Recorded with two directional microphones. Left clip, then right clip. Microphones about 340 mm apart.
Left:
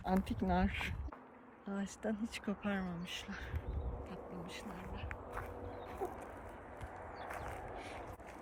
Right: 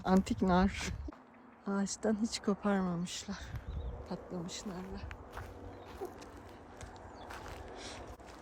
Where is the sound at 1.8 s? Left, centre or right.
Right.